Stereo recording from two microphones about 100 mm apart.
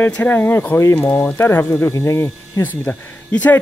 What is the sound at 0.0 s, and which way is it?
Speech, 20° left (ahead or behind).